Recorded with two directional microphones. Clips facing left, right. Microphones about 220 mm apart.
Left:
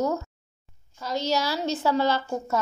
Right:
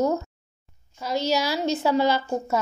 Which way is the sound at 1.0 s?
10° right (ahead or behind).